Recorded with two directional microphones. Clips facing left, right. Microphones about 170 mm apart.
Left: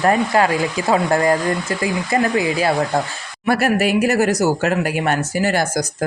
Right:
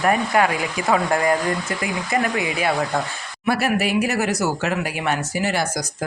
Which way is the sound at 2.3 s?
35° left (ahead or behind).